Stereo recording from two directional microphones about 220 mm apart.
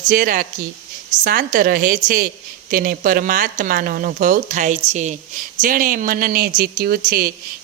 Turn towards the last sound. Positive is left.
turn(degrees=-40)  # may be behind; listen again after turning